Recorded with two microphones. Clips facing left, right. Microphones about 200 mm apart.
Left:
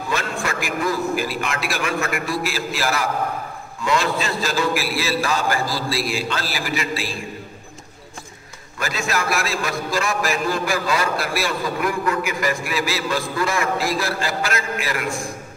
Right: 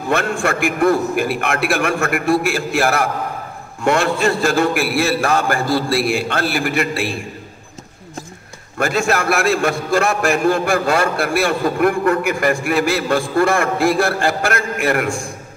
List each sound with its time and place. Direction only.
0.1 s a man's voice: 55° right (ahead or behind)
8.7 s a man's voice: 55° right (ahead or behind)